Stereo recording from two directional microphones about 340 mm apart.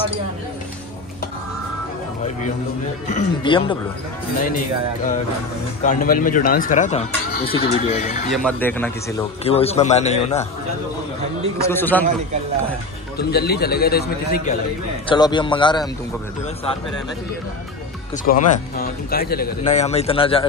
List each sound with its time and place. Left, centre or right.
3.1 s a man's voice: centre
5.9 s speech: left
8.3 s speech: centre
9.4 s speech: centre
11.6 s speech: centre
13.2 s speech: left
15.0 s a man's voice: centre
18.2 s speech: left